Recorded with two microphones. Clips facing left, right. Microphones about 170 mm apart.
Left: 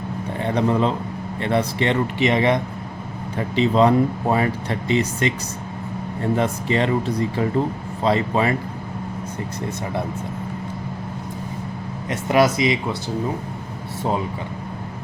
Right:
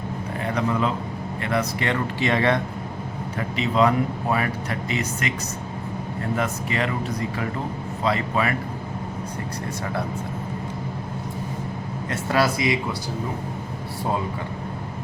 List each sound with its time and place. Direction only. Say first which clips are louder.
0.4 s a man's voice: left 4 dB; 30° left (ahead or behind)
3.3 s speech: left 5 dB; 30° left (ahead or behind)
6.3 s speech: left 5 dB; 30° left (ahead or behind)
12.0 s speech: left 5 dB; 20° left (ahead or behind)